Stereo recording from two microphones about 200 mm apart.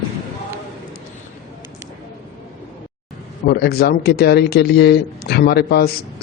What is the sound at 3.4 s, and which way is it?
Speech, 50° left (ahead or behind).